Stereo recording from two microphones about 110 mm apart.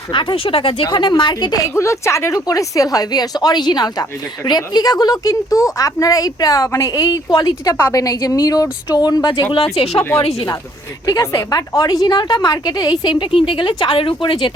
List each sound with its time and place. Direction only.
0.1 s a woman's voice: 50° left (ahead or behind)
1.7 s a woman's voice: 25° left (ahead or behind); by 9.6 s 45° left (ahead or behind)
9.7 s speech: 70° left (ahead or behind)
11.0 s a woman's voice: 35° left (ahead or behind); by 14.5 s 50° left (ahead or behind)